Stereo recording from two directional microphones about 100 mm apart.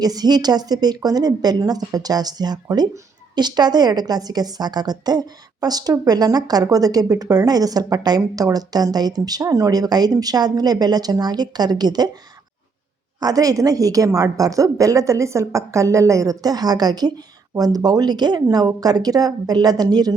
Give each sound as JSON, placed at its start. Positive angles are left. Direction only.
{"t": 0.0, "sound": "a woman's voice", "side_deg": -40}
{"t": 13.1, "sound": "a woman's voice", "side_deg": -40}